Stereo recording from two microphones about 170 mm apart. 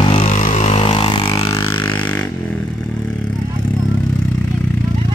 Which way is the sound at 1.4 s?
30° left (ahead or behind).